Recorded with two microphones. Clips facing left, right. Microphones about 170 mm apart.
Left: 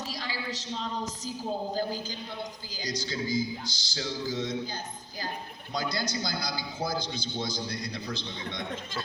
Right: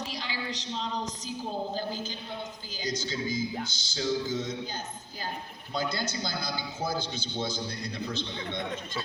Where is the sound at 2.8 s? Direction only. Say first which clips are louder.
Right 1 dB; 35° left (ahead or behind).